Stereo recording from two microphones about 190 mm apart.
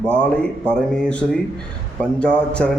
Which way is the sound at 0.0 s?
5° left (ahead or behind).